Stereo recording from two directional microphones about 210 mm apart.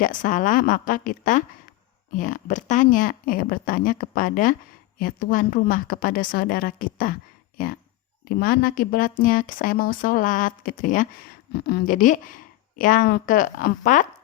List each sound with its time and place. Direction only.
0.0 s a woman's voice: 40° left (ahead or behind)